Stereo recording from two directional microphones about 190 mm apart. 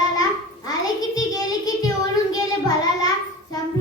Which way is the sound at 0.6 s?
20° left (ahead or behind).